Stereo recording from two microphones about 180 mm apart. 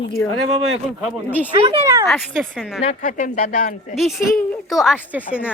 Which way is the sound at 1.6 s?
20° right (ahead or behind).